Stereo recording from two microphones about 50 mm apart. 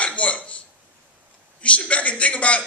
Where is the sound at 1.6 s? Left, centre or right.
Left.